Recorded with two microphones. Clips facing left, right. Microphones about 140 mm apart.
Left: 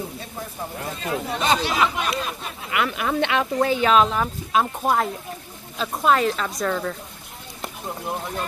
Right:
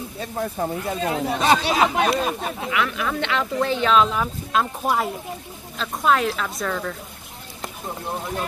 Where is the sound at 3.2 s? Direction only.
55° left (ahead or behind).